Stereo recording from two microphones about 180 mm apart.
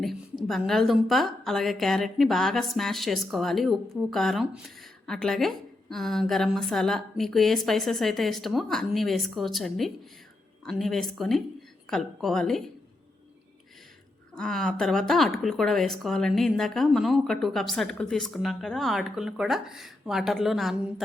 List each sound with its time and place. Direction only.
0.0 s a woman's voice: centre (ahead or behind)
14.3 s a woman's voice: 5° left (ahead or behind)